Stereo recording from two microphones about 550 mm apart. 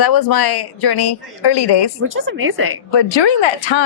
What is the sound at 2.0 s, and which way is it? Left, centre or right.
Speech, right.